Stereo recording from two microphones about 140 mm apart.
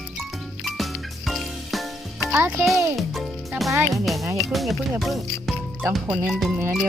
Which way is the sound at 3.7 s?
20° right (ahead or behind).